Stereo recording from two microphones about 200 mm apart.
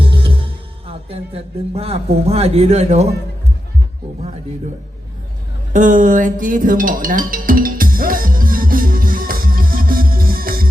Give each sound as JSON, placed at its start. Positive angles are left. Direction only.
{"t": 0.0, "sound": "music", "side_deg": -25}
{"t": 1.7, "sound": "speech", "side_deg": -30}
{"t": 5.7, "sound": "music", "side_deg": -40}